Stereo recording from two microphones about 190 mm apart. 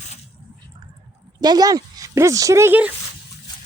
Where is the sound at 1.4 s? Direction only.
20° right (ahead or behind).